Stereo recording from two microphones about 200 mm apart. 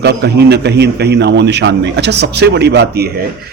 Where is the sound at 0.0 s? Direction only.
55° right (ahead or behind).